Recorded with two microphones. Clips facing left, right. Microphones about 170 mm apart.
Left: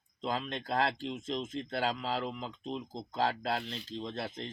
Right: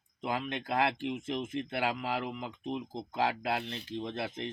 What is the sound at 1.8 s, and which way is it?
Speech, 15° right (ahead or behind).